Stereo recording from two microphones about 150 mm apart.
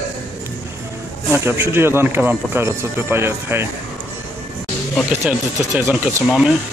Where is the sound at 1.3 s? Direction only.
15° right (ahead or behind).